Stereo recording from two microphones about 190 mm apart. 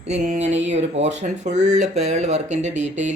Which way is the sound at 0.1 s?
35° right (ahead or behind).